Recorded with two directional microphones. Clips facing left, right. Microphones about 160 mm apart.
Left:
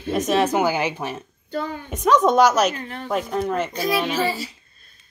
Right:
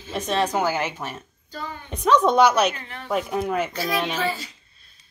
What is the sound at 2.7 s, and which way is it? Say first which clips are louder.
Speech: left 4 dB; 45° left (ahead or behind).